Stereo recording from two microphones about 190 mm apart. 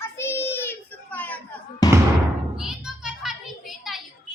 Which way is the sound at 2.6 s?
5° right (ahead or behind).